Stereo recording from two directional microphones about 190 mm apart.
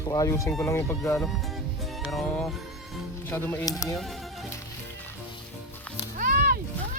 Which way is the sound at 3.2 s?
10° left (ahead or behind).